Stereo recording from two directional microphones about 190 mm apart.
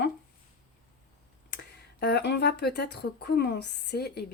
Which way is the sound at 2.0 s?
60° left (ahead or behind).